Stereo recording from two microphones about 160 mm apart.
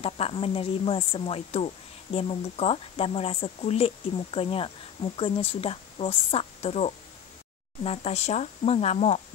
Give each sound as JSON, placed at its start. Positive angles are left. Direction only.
{"t": 0.0, "sound": "speech", "side_deg": 35}